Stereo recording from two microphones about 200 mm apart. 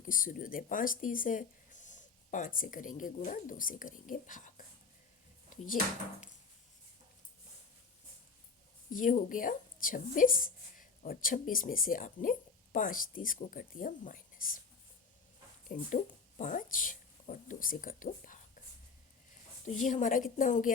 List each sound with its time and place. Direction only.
0.0 s speech: 45° left (ahead or behind)
8.9 s speech: 40° left (ahead or behind)
15.7 s a woman's voice: 40° left (ahead or behind)
19.8 s a woman's voice: 40° left (ahead or behind)